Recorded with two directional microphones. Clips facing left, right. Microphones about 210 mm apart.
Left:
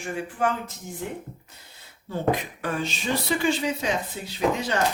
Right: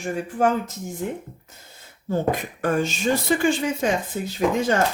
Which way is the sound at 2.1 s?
45° right (ahead or behind).